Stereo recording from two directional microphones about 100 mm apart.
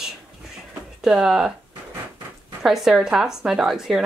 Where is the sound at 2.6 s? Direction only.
5° right (ahead or behind).